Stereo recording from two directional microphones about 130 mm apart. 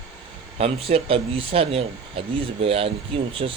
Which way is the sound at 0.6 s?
50° right (ahead or behind).